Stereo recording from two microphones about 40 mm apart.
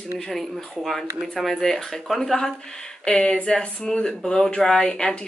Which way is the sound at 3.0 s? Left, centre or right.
Left.